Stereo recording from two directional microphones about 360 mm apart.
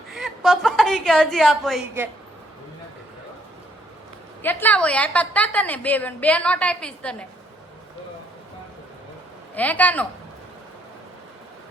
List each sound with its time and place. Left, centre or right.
0.1 s a woman's voice: centre
4.4 s a woman's voice: centre
9.6 s a woman's voice: centre